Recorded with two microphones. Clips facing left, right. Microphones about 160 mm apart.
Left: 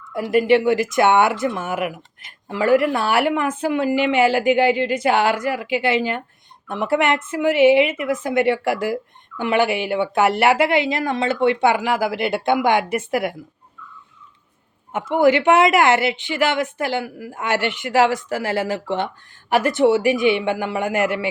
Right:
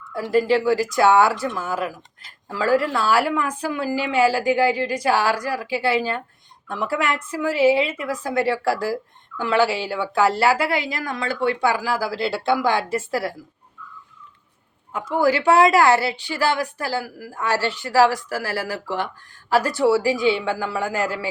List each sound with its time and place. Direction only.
0.1 s speech: 20° left (ahead or behind)
15.1 s speech: 20° left (ahead or behind)